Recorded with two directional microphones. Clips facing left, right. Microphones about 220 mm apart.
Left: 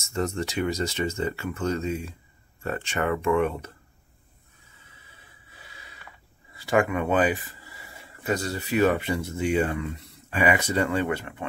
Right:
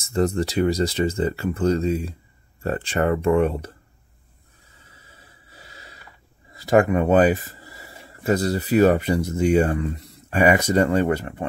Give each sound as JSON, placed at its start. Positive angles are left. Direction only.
{"t": 0.0, "sound": "speech", "side_deg": -35}
{"t": 4.8, "sound": "a sound", "side_deg": -40}
{"t": 6.5, "sound": "speech", "side_deg": -40}